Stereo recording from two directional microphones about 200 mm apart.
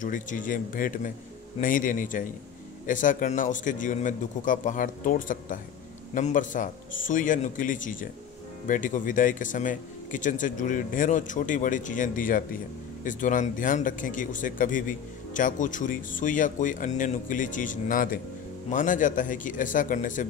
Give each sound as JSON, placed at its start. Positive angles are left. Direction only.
{"t": 0.0, "sound": "speech", "side_deg": 40}